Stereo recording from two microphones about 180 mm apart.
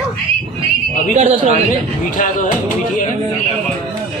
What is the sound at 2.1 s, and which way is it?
Speech, 45° left (ahead or behind).